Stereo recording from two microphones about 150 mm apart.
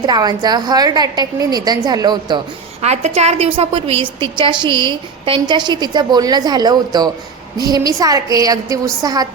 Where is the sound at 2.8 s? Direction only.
45° right (ahead or behind).